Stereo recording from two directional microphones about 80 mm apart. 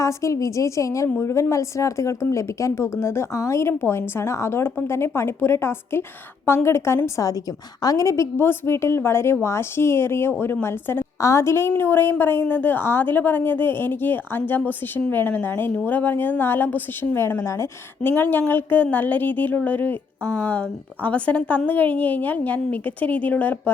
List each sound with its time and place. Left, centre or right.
0.0 s a woman's voice: left
11.2 s a woman's voice: left
17.2 s speech: left
18.0 s a woman's voice: left